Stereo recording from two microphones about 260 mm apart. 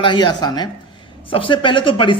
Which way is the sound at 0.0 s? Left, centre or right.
Centre.